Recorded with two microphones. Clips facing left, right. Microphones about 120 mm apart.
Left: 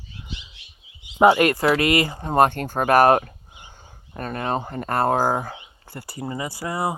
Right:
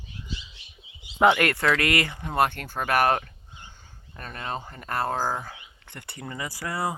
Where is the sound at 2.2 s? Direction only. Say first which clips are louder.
Left 6 dB; 45° left (ahead or behind).